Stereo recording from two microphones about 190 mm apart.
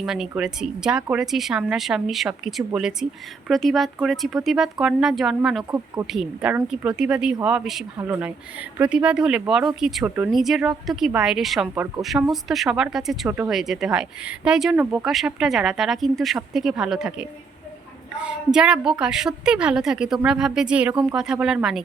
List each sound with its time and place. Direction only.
0.0 s speech: centre (ahead or behind)
5.7 s speech: 15° right (ahead or behind)
6.1 s speech: 5° right (ahead or behind)